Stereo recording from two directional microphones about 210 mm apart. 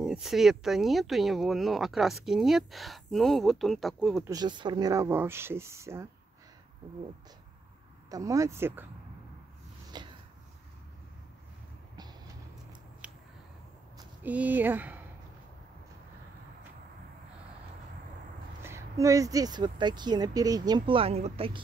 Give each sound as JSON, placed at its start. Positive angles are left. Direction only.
{"t": 0.0, "sound": "speech", "side_deg": 0}
{"t": 4.3, "sound": "speech", "side_deg": -20}
{"t": 8.1, "sound": "speech", "side_deg": -15}
{"t": 9.9, "sound": "a sound", "side_deg": -20}
{"t": 13.0, "sound": "finger snapping", "side_deg": -5}
{"t": 13.9, "sound": "speech", "side_deg": -5}
{"t": 18.6, "sound": "speech", "side_deg": -15}